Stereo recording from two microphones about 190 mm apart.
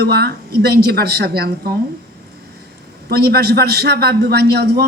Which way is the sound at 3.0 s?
55° right (ahead or behind).